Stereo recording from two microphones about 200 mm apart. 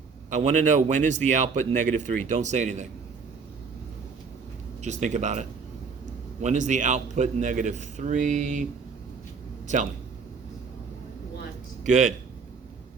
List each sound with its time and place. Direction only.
0.3 s a man's voice: 35° right (ahead or behind)
4.8 s a man's voice: 35° right (ahead or behind)
11.8 s speech: 35° right (ahead or behind)